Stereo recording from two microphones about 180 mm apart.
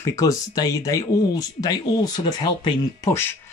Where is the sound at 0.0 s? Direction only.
20° left (ahead or behind).